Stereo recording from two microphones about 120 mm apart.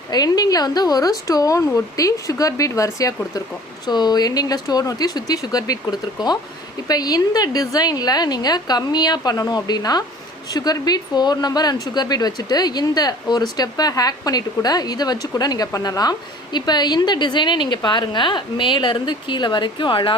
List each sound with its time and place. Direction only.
0.1 s speech: 35° left (ahead or behind)